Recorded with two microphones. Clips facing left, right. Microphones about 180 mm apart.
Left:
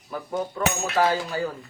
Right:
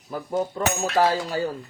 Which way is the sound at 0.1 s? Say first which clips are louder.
Right 3 dB; 30° right (ahead or behind).